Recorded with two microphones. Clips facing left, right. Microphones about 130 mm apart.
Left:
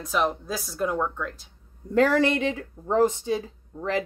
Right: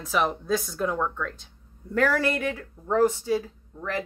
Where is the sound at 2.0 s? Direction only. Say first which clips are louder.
Left 3 dB; 20° left (ahead or behind).